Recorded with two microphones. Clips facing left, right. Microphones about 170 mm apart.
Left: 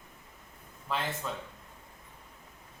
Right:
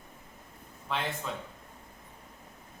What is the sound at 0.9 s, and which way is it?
Speech, centre (ahead or behind).